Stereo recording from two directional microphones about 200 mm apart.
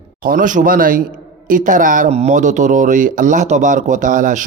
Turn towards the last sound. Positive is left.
turn(degrees=-40)  # may be behind; listen again after turning